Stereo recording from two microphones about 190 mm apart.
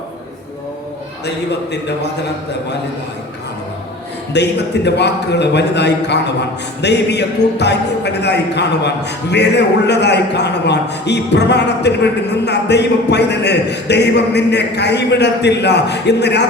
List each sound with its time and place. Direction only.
4.4 s a man's voice: 65° left (ahead or behind)